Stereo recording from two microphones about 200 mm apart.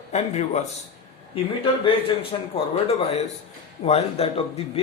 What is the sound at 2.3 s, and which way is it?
Speech, 25° left (ahead or behind).